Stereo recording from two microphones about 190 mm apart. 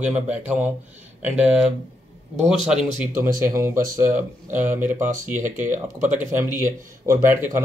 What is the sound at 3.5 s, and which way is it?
Speech, 15° right (ahead or behind).